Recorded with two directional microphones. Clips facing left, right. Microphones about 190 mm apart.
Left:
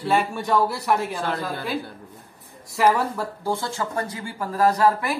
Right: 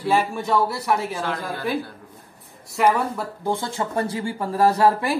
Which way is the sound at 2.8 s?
5° left (ahead or behind).